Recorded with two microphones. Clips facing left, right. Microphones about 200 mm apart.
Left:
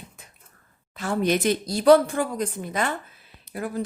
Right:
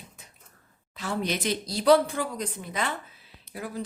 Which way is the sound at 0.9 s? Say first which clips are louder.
Left 6 dB; 50° left (ahead or behind).